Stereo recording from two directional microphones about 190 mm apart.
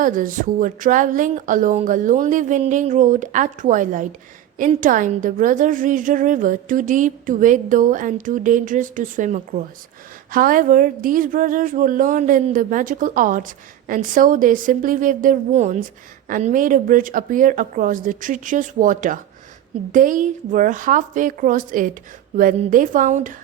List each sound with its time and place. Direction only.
0.0 s a woman's voice: 45° right (ahead or behind)